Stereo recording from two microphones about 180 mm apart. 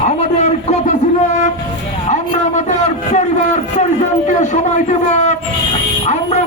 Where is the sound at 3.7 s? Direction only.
40° left (ahead or behind).